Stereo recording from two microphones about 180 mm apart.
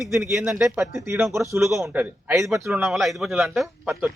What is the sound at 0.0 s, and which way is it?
Speech, centre (ahead or behind).